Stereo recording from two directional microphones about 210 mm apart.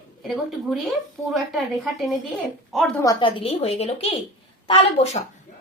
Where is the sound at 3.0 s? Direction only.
20° left (ahead or behind).